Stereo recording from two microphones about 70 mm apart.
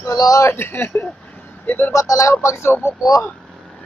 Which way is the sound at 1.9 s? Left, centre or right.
Left.